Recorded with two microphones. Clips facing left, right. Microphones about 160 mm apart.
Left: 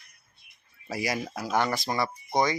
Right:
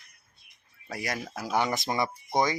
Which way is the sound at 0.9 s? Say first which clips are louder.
Left 4 dB; 5° left (ahead or behind).